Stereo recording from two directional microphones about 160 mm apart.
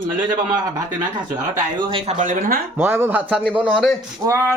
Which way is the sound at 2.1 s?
55° right (ahead or behind).